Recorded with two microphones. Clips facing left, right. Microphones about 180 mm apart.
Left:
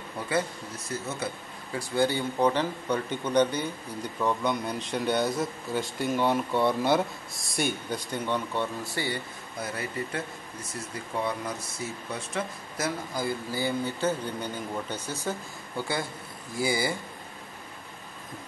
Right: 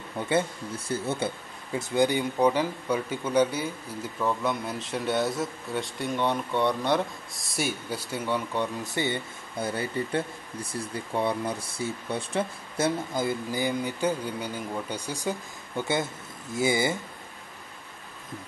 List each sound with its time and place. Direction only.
0.3 s speech: 30° right (ahead or behind); by 8.6 s 10° right (ahead or behind)
8.8 s speech: 20° right (ahead or behind)